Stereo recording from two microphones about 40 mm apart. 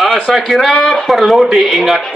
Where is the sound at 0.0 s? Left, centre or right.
Centre.